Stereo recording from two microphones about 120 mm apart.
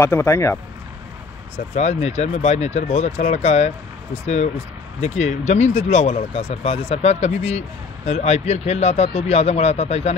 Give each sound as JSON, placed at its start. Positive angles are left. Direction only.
{"t": 0.0, "sound": "speech", "side_deg": 25}
{"t": 1.8, "sound": "speech", "side_deg": 65}